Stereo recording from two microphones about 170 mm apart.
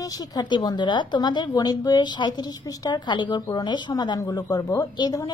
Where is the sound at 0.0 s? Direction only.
20° left (ahead or behind).